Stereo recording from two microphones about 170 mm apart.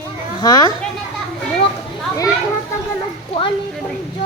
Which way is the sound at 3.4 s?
25° left (ahead or behind).